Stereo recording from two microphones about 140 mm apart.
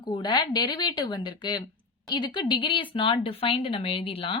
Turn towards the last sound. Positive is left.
turn(degrees=40)  # may be behind; listen again after turning